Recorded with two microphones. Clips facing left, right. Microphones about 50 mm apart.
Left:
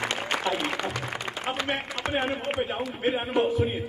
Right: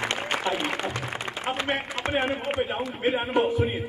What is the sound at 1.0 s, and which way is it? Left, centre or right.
Music, centre.